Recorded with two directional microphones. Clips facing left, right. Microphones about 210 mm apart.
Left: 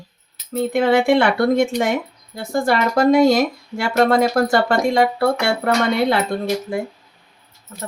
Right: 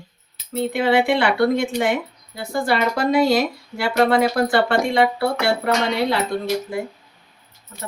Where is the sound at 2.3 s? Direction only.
45° left (ahead or behind).